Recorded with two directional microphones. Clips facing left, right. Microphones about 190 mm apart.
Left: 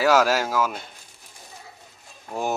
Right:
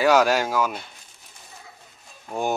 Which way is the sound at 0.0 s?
Centre (ahead or behind).